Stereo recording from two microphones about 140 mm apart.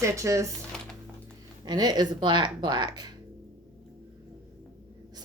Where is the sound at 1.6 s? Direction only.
30° right (ahead or behind).